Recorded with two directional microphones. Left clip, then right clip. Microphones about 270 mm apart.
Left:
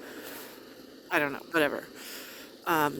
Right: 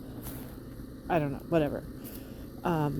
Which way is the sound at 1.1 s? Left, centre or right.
Left.